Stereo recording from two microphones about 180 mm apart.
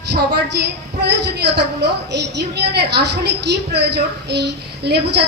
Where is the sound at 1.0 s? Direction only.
70° right (ahead or behind).